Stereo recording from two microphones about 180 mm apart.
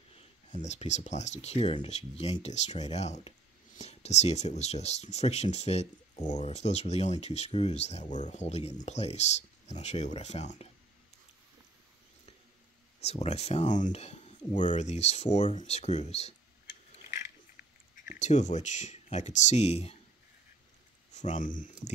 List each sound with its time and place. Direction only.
0.1 s speech: 40° left (ahead or behind)
13.0 s speech: 35° left (ahead or behind)
18.0 s speech: 40° left (ahead or behind)
21.1 s speech: 40° left (ahead or behind)